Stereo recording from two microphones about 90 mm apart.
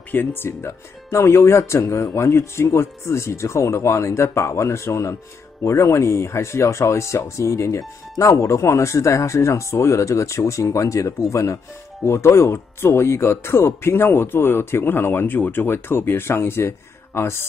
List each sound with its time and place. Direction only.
0.1 s speech: 20° left (ahead or behind)